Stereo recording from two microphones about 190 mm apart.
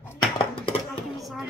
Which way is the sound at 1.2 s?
Centre (ahead or behind).